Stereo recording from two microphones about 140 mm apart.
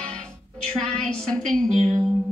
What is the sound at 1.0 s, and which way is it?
Speech, 5° left (ahead or behind).